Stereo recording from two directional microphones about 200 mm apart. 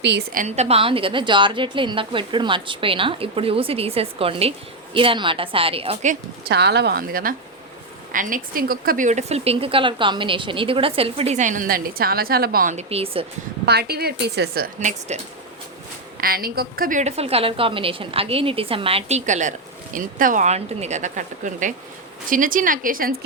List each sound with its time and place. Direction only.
0.3 s a woman's voice: 35° right (ahead or behind)
6.5 s a woman's voice: 55° right (ahead or behind)
12.7 s a woman's voice: 30° right (ahead or behind)
13.7 s a woman's voice: 55° right (ahead or behind); by 15.2 s 35° right (ahead or behind)
16.2 s a woman's voice: 50° right (ahead or behind)